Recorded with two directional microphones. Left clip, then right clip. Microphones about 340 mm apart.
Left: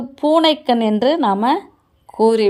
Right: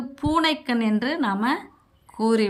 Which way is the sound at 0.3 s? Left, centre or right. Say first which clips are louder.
Left 7 dB; centre.